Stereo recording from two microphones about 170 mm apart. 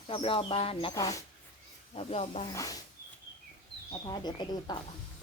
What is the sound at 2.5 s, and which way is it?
Speech, 20° left (ahead or behind).